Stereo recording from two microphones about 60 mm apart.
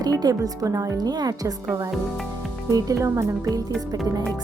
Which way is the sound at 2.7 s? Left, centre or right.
Right.